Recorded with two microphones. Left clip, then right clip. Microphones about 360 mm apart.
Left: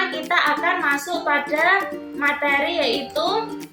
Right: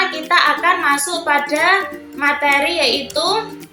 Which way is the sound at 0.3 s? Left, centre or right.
Left.